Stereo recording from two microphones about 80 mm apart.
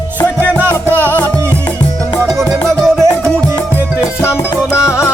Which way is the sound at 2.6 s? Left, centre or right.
Centre.